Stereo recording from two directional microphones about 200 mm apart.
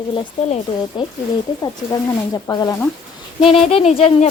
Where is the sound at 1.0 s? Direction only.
25° left (ahead or behind).